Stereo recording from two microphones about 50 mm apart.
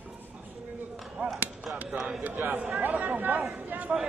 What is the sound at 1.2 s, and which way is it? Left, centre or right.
Chop, right.